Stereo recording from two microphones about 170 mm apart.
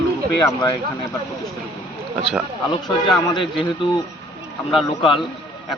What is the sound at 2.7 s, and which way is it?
A man's voice, 25° left (ahead or behind).